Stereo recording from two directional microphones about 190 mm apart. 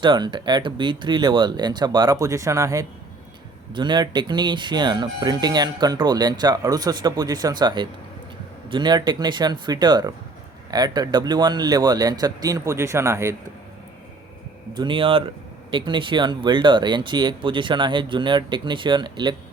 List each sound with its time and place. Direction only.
0.0 s speech: 25° right (ahead or behind)
14.8 s speech: 25° right (ahead or behind)